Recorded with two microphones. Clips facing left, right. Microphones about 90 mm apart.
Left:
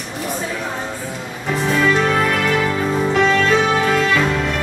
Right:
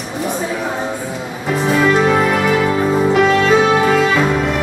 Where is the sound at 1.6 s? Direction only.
5° right (ahead or behind).